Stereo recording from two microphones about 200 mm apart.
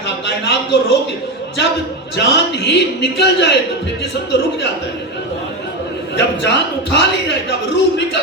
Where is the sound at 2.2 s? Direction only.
60° left (ahead or behind).